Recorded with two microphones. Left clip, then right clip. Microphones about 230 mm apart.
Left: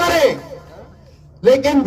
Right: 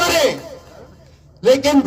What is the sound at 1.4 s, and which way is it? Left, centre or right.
Speech, right.